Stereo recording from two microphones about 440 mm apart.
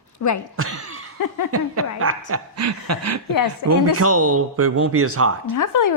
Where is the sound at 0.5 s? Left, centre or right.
Right.